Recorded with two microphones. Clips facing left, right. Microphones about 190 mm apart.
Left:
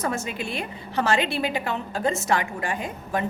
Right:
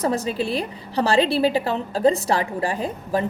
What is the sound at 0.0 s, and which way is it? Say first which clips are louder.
A woman's voice: right 6 dB; 35° right (ahead or behind).